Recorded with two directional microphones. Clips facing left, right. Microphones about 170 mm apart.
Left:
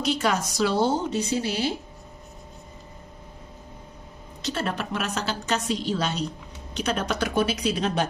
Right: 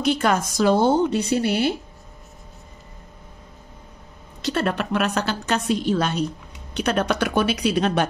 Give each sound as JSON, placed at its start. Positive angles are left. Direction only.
{"t": 0.0, "sound": "a woman's voice", "side_deg": -55}
{"t": 4.5, "sound": "a woman's voice", "side_deg": -60}